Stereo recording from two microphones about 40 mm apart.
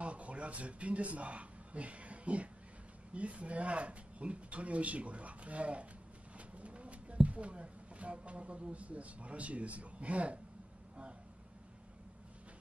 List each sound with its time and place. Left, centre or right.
0.0 s speech: right
6.3 s a sound: right
7.2 s speech: right